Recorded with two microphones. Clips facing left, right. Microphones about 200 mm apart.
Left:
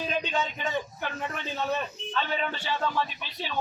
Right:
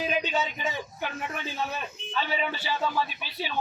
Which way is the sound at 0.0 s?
5° right (ahead or behind).